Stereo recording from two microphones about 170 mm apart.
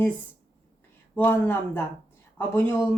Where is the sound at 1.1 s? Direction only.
10° left (ahead or behind).